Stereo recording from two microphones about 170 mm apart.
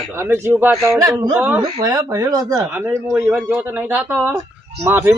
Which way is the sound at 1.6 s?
25° right (ahead or behind).